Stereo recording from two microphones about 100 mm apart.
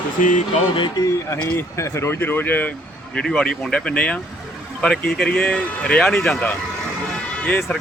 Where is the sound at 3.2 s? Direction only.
10° left (ahead or behind).